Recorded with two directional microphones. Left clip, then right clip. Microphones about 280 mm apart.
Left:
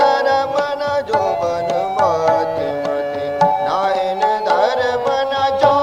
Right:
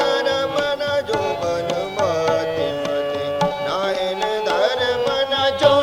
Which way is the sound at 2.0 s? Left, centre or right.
Left.